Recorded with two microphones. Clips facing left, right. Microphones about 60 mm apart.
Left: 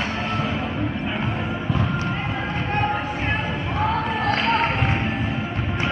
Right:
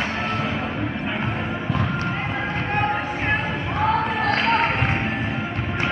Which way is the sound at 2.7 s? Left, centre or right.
Right.